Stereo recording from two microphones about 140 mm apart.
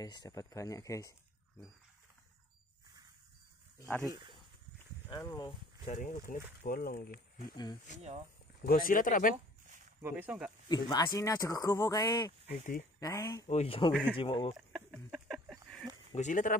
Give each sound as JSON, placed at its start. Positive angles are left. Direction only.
{"t": 0.0, "sound": "speech", "side_deg": 25}
{"t": 3.7, "sound": "speech", "side_deg": 20}
{"t": 4.1, "sound": "speech", "side_deg": -35}
{"t": 5.1, "sound": "speech", "side_deg": 30}
{"t": 5.9, "sound": "speech", "side_deg": 65}
{"t": 8.6, "sound": "speech", "side_deg": 90}
{"t": 10.0, "sound": "speech", "side_deg": -15}
{"t": 10.7, "sound": "speech", "side_deg": 30}
{"t": 13.5, "sound": "speech", "side_deg": 45}
{"t": 14.7, "sound": "a sound", "side_deg": 0}
{"t": 16.2, "sound": "speech", "side_deg": 65}